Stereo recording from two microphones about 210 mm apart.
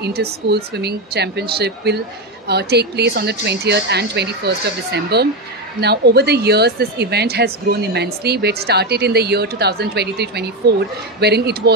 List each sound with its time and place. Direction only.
0.0 s speech: 50° right (ahead or behind)